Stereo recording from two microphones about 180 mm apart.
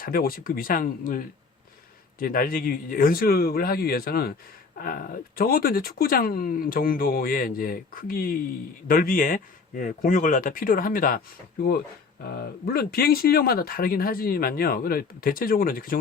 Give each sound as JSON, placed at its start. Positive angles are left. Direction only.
{"t": 0.0, "sound": "speech", "side_deg": 55}
{"t": 12.4, "sound": "speech", "side_deg": 60}